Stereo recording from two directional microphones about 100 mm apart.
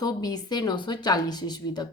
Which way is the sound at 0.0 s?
40° left (ahead or behind).